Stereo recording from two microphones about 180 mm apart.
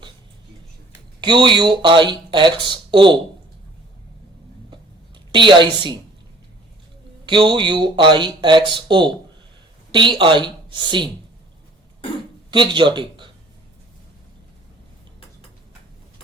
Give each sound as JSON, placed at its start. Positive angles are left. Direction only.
{"t": 1.2, "sound": "speech", "side_deg": -25}
{"t": 5.3, "sound": "speech", "side_deg": -25}
{"t": 7.3, "sound": "speech", "side_deg": -25}
{"t": 12.5, "sound": "speech", "side_deg": -25}